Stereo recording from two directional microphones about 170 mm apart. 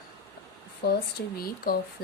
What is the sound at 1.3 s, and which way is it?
Speech, 60° left (ahead or behind).